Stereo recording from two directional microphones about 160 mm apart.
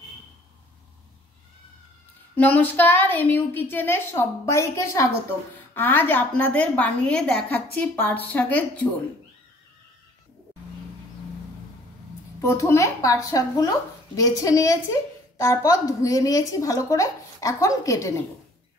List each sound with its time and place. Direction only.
2.3 s a woman's voice: 10° left (ahead or behind)
12.4 s a woman's voice: 20° left (ahead or behind)